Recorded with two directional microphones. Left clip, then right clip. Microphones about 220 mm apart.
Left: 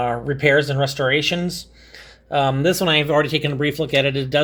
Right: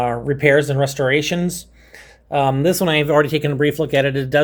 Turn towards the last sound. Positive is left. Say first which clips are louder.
# right 2 dB
turn(degrees=-10)  # may be behind; listen again after turning